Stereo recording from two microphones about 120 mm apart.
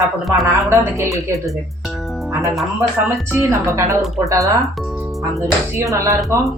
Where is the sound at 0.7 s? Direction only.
25° right (ahead or behind).